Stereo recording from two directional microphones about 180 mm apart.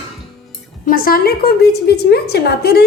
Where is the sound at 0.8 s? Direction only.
55° left (ahead or behind).